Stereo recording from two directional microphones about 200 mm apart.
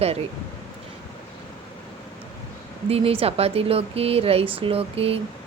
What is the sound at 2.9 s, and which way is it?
Speech, 30° right (ahead or behind).